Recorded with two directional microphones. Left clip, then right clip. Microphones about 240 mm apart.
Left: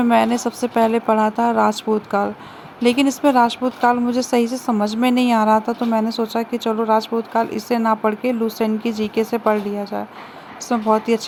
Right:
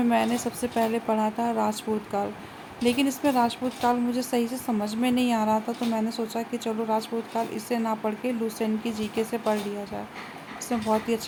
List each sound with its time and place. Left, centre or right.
0.1 s a woman's voice: centre